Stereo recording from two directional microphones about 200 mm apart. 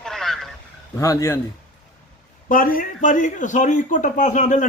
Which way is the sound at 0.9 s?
15° left (ahead or behind).